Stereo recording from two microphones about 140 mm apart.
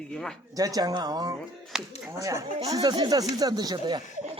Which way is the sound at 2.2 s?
20° right (ahead or behind).